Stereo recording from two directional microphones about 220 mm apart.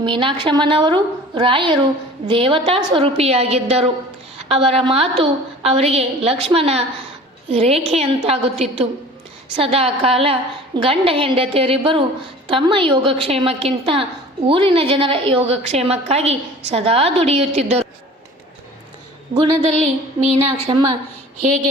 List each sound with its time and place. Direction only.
0.0 s a woman's voice: 20° right (ahead or behind)
19.3 s a woman's voice: 20° right (ahead or behind)